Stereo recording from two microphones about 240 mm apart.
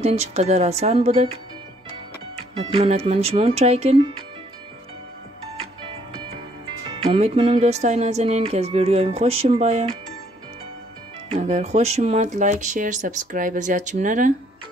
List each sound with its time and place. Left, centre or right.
0.0 s speech: right
2.5 s speech: right
7.1 s speech: right
11.3 s speech: right